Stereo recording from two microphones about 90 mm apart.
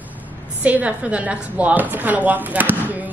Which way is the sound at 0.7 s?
15° right (ahead or behind).